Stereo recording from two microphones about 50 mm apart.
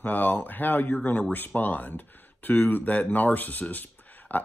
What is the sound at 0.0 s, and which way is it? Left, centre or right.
Speech, left.